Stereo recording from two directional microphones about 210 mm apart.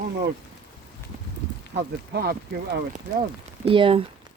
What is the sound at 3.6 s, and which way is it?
Speech, 25° right (ahead or behind).